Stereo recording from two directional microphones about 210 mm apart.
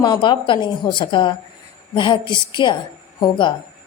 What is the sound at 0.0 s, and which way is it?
A woman's voice, 20° left (ahead or behind).